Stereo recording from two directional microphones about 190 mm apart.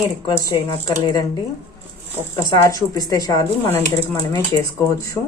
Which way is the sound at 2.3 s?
20° left (ahead or behind).